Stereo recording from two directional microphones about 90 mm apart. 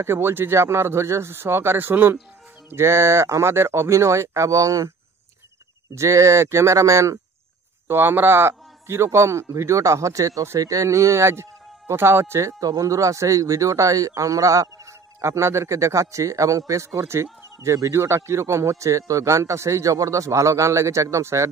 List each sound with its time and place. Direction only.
0.0 s speech: 25° right (ahead or behind)
7.9 s speech: 25° right (ahead or behind)